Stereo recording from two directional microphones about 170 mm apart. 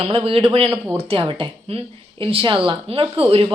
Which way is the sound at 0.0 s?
30° right (ahead or behind).